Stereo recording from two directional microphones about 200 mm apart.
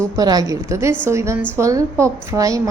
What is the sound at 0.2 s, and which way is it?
A woman's voice, 20° right (ahead or behind).